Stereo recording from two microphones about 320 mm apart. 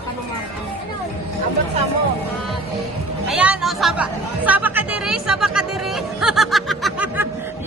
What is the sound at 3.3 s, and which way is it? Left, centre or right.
Chatter, centre.